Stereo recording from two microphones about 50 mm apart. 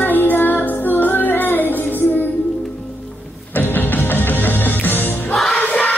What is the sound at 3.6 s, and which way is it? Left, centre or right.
Music, left.